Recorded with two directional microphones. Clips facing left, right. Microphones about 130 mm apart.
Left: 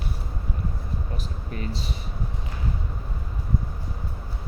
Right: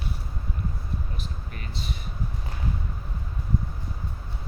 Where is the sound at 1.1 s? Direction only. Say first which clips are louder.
Left 4 dB; 35° left (ahead or behind).